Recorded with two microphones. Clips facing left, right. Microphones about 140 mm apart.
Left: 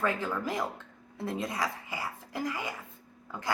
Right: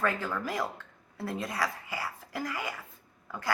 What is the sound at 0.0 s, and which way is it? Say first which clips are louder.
A woman's voice: even; 20° left (ahead or behind).